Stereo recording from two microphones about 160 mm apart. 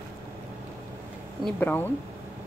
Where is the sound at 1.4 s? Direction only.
10° left (ahead or behind).